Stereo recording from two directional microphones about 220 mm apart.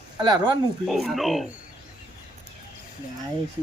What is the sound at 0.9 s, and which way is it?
Speech, centre (ahead or behind).